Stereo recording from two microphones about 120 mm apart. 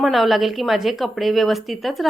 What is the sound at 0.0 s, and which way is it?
A woman's voice, centre (ahead or behind).